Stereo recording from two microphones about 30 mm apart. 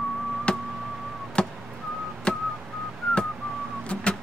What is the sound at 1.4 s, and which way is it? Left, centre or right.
Chop, left.